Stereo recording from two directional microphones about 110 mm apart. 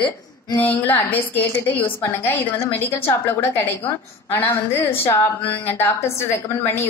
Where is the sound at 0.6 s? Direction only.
15° left (ahead or behind).